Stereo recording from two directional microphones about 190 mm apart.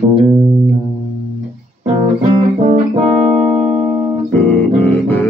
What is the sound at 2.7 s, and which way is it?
Music, 35° right (ahead or behind).